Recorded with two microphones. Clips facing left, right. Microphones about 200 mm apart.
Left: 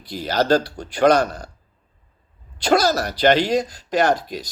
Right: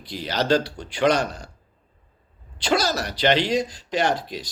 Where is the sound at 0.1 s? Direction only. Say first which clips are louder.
Left 3 dB; 45° left (ahead or behind).